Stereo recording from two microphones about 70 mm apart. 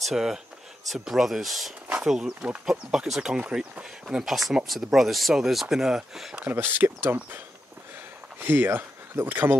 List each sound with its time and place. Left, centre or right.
0.0 s speech: centre
6.5 s speech: right